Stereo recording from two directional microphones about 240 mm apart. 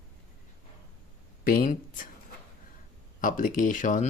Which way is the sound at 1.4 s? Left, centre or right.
Left.